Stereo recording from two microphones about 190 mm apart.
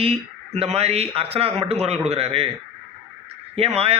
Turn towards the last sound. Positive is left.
turn(degrees=-30)  # may be behind; listen again after turning